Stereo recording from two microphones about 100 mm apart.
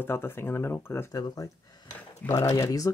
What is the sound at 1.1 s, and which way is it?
Speech, 40° left (ahead or behind).